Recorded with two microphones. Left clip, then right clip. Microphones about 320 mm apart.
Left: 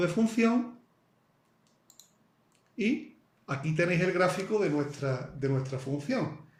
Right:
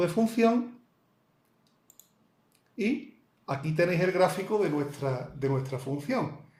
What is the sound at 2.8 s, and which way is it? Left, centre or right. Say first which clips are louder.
Speech: even; centre.